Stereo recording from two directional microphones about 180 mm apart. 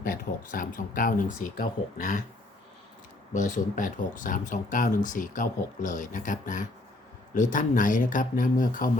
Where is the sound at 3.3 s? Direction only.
45° left (ahead or behind).